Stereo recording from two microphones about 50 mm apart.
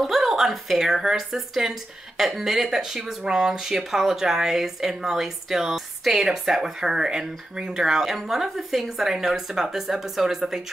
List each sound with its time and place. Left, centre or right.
0.0 s speech: centre